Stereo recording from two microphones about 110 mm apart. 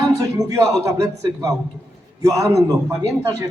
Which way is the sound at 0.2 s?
30° right (ahead or behind).